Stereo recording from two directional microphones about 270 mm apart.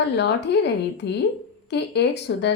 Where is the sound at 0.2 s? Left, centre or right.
Left.